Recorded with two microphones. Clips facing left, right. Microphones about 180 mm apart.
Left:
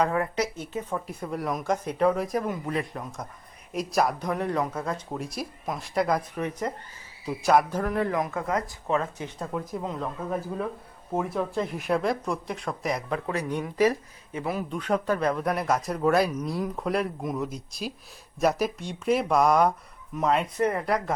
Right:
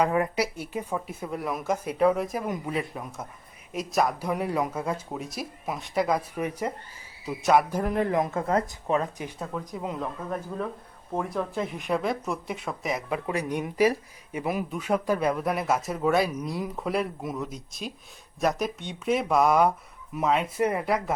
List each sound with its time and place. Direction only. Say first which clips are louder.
0.0 s a man's voice: right 1 dB; 15° right (ahead or behind)
9.5 s a man's voice: left 2 dB; 5° left (ahead or behind)
9.8 s speech: even; 5° right (ahead or behind)
11.1 s a man's voice: left 2 dB; 5° left (ahead or behind)